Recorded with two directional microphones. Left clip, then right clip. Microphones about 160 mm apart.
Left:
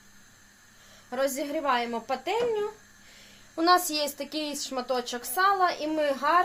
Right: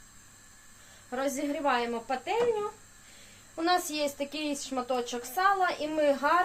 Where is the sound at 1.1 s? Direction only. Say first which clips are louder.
Left 3 dB; 55° left (ahead or behind).